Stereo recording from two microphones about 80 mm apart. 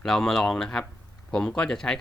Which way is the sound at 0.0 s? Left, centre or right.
Centre.